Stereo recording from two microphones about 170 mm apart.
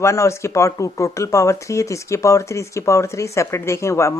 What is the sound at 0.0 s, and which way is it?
Speech, 15° left (ahead or behind).